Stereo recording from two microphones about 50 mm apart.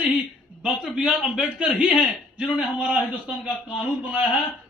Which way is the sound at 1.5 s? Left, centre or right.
Right.